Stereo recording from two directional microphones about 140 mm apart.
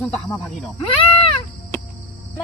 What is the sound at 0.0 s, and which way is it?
Speech, 5° left (ahead or behind).